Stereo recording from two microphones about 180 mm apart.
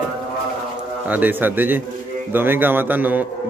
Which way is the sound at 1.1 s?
10° right (ahead or behind).